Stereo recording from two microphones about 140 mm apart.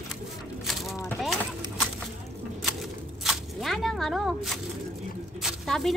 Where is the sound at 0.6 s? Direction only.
Centre (ahead or behind).